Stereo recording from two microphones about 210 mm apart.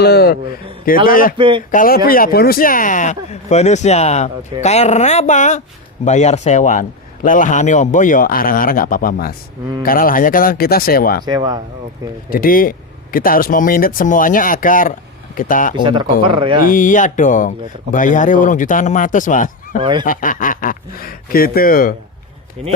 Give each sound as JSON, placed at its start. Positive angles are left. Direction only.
{"t": 0.0, "sound": "speech", "side_deg": 50}
{"t": 1.4, "sound": "speech", "side_deg": -25}
{"t": 1.7, "sound": "speech", "side_deg": 40}
{"t": 11.3, "sound": "speech", "side_deg": -20}
{"t": 12.3, "sound": "speech", "side_deg": 40}
{"t": 15.8, "sound": "speech", "side_deg": -20}
{"t": 16.6, "sound": "speech", "side_deg": 40}
{"t": 19.8, "sound": "speech", "side_deg": -20}
{"t": 20.1, "sound": "speech", "side_deg": 40}